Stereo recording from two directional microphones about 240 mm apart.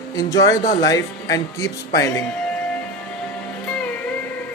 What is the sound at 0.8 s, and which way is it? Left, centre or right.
Speech, centre.